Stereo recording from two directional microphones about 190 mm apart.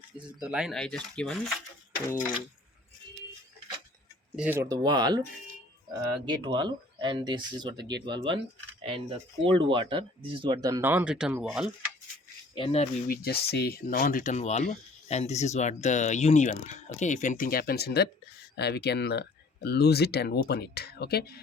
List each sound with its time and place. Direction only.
0.2 s speech: 25° right (ahead or behind)
0.4 s speech: 5° right (ahead or behind)
4.4 s speech: 10° right (ahead or behind)
4.8 s speech: 20° right (ahead or behind); by 11.7 s 5° right (ahead or behind)
12.5 s speech: 30° left (ahead or behind)
13.1 s speech: 55° left (ahead or behind)